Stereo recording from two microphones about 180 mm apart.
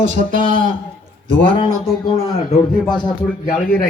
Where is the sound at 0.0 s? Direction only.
45° right (ahead or behind).